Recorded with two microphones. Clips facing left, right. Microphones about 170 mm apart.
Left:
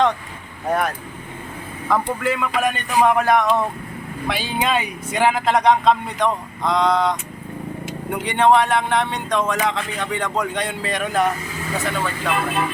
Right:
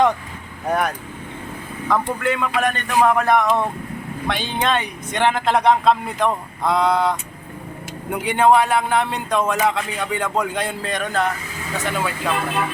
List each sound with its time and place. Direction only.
0.7 s speech: centre (ahead or behind)
11.9 s speech: 10° right (ahead or behind)